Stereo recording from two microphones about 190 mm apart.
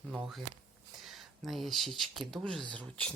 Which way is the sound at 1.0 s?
Centre (ahead or behind).